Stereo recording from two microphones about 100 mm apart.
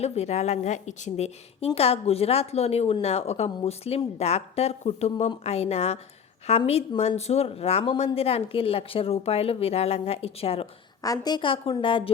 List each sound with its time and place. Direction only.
0.0 s a woman's voice: 90° left
11.0 s a woman's voice: 40° left (ahead or behind)
11.4 s a woman's voice: 60° left (ahead or behind)